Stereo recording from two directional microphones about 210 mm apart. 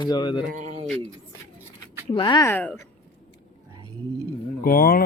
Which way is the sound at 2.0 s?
25° left (ahead or behind).